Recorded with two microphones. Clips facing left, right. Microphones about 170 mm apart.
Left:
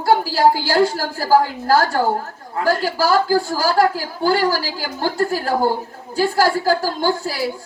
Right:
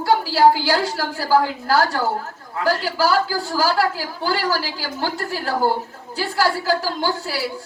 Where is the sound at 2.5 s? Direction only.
40° left (ahead or behind).